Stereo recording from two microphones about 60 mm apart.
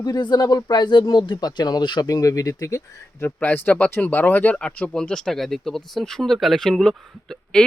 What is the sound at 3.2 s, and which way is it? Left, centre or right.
Speech, left.